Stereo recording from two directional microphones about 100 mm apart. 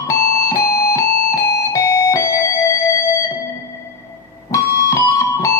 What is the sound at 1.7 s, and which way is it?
Music, 30° left (ahead or behind).